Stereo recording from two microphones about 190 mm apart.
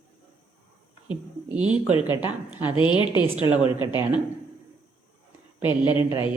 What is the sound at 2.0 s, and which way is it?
Speech, 25° left (ahead or behind).